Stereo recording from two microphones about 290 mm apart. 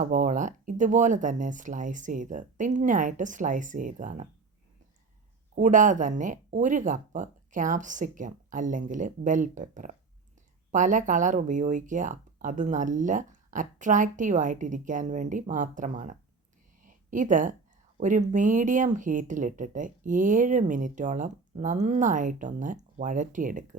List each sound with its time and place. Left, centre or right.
0.0 s speech: right
5.5 s speech: right
16.8 s a sound: right
17.9 s speech: right